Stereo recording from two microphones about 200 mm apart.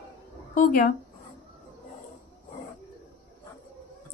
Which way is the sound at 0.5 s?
45° left (ahead or behind).